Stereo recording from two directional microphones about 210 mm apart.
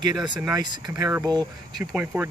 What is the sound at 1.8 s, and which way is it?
Speech, 5° right (ahead or behind).